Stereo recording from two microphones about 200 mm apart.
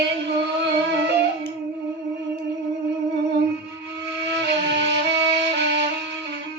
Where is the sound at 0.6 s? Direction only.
60° right (ahead or behind).